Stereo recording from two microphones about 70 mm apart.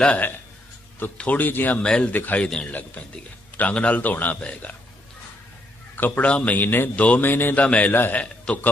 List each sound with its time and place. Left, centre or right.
1.2 s speech: left
1.8 s speech: centre
2.5 s speech: centre
6.0 s a man's voice: left
7.5 s speech: centre